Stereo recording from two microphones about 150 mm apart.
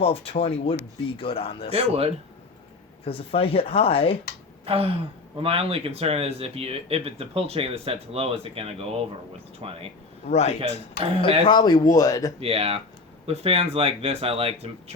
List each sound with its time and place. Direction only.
0.0 s speech: 40° left (ahead or behind)
1.7 s speech: 45° right (ahead or behind)
3.0 s speech: 40° left (ahead or behind)
4.6 s speech: 40° right (ahead or behind)
10.2 s a man's voice: 45° left (ahead or behind)
11.4 s speech: 30° left (ahead or behind)
12.4 s speech: 40° right (ahead or behind)